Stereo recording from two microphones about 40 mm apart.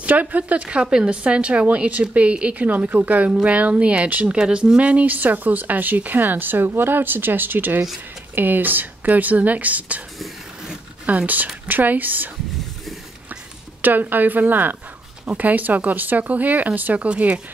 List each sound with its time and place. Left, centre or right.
0.0 s speech: right
0.7 s speech: right
2.7 s speech: right
3.0 s speech: right
4.4 s speech: right
5.0 s speech: right
11.1 s speech: right
13.7 s speech: right